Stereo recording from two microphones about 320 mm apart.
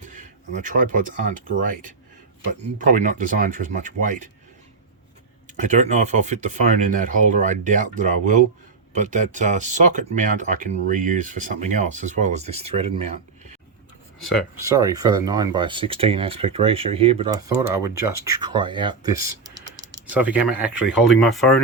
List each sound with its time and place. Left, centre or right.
0.0 s a sound: right
2.5 s speech: right
5.5 s speech: right
14.7 s speech: centre